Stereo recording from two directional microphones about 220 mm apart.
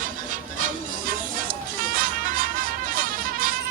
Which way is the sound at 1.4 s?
40° right (ahead or behind).